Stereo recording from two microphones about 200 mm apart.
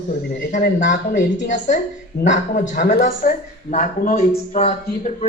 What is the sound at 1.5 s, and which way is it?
Speech, 40° left (ahead or behind).